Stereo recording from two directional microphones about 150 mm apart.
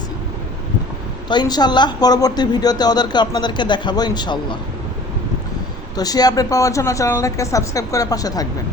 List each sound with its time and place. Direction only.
1.3 s a woman's voice: 30° left (ahead or behind)
6.0 s a woman's voice: 25° left (ahead or behind)